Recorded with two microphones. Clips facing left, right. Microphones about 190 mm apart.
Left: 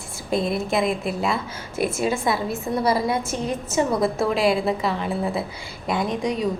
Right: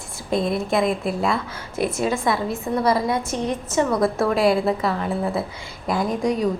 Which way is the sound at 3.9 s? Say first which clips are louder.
Right 2 dB; 25° left (ahead or behind).